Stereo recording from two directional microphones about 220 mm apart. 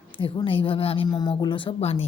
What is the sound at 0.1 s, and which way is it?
A woman's voice, 25° left (ahead or behind).